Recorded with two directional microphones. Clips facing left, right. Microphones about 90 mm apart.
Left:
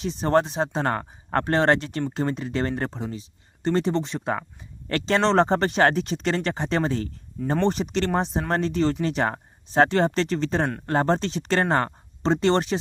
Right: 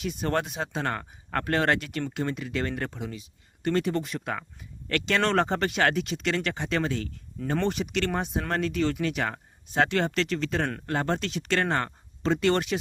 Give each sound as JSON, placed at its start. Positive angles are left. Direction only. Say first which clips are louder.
{"t": 0.0, "sound": "speech", "louder": "left 7 dB", "side_deg": 30}